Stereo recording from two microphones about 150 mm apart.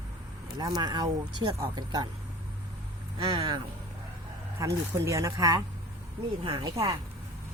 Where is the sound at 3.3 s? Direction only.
35° right (ahead or behind).